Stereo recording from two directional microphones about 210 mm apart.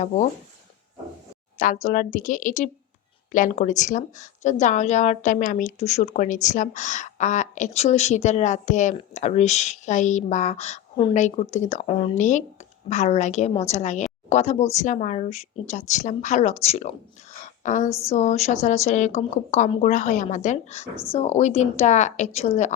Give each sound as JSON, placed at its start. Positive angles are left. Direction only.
{"t": 1.5, "sound": "a woman's voice", "side_deg": 40}
{"t": 17.8, "sound": "speech", "side_deg": 15}
{"t": 18.1, "sound": "a woman's voice", "side_deg": 35}